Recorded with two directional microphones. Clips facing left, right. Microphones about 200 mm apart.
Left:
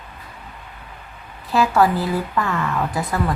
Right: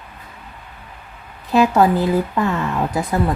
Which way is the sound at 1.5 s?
20° right (ahead or behind).